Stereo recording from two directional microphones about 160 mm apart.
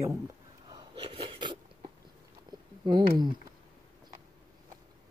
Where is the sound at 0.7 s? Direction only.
35° right (ahead or behind).